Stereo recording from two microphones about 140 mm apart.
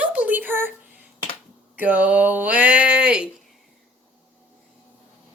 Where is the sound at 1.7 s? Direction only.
10° right (ahead or behind).